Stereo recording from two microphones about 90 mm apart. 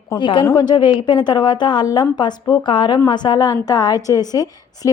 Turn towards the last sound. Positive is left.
turn(degrees=45)  # may be behind; listen again after turning